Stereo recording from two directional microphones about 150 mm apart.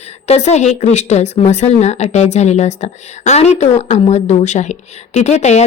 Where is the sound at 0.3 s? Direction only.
50° left (ahead or behind).